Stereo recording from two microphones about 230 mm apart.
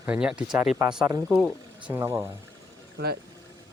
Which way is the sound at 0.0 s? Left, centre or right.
Centre.